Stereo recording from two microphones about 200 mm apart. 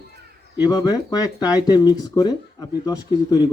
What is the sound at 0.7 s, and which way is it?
A man's voice, 20° left (ahead or behind).